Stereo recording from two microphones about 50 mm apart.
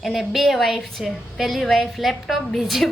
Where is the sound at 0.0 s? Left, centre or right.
Centre.